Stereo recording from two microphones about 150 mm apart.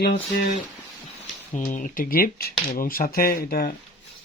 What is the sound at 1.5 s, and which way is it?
Speech, 60° left (ahead or behind).